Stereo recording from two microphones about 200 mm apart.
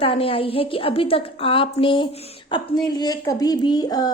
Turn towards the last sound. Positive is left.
turn(degrees=20)  # may be behind; listen again after turning